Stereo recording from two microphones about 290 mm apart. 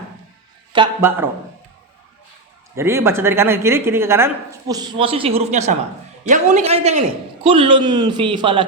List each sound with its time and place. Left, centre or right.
0.7 s a woman's voice: centre
2.7 s a woman's voice: centre